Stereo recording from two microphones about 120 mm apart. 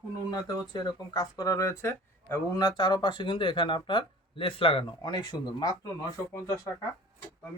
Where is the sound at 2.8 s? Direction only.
40° left (ahead or behind).